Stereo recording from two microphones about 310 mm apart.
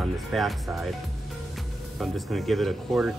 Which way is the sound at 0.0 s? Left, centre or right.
Centre.